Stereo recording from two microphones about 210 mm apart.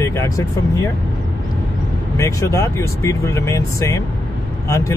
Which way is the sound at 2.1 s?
15° left (ahead or behind).